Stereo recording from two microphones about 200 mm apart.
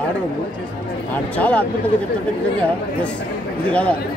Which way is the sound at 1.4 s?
5° left (ahead or behind).